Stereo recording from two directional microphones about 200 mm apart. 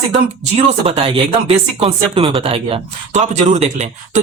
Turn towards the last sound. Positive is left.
turn(degrees=-35)  # may be behind; listen again after turning